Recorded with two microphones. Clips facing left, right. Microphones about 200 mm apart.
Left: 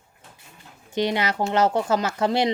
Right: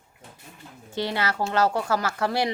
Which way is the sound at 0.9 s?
20° left (ahead or behind).